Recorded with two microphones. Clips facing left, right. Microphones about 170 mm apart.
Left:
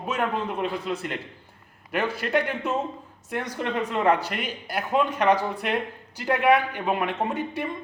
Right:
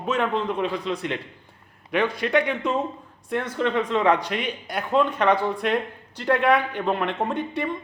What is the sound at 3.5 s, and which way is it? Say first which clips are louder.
Speech: right 5 dB; 70° right (ahead or behind).